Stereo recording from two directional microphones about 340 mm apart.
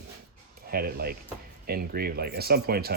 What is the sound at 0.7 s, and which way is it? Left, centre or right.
Speech, right.